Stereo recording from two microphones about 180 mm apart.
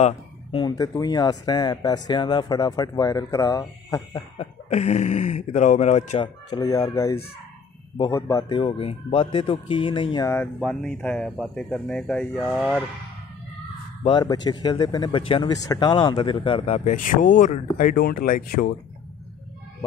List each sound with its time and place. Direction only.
0.0 s speech: 30° left (ahead or behind)
4.4 s speech: 40° left (ahead or behind)
6.2 s speech: 20° left (ahead or behind)
8.5 s speech: 30° left (ahead or behind)
10.2 s speech: 10° left (ahead or behind)
14.0 s speech: 25° left (ahead or behind); by 18.8 s 50° left (ahead or behind)